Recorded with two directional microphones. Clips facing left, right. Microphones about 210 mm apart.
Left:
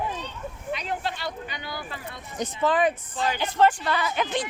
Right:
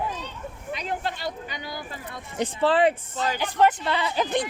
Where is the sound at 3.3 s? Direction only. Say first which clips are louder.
Even; 15° right (ahead or behind); by 4.3 s 30° right (ahead or behind).